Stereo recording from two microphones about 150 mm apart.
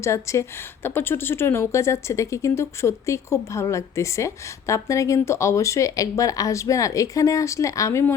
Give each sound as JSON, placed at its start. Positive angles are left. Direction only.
{"t": 0.0, "sound": "speech", "side_deg": 20}